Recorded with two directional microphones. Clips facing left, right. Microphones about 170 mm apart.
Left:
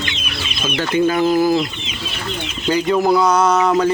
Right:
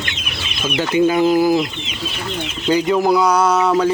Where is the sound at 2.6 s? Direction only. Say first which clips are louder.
Even; 15° right (ahead or behind).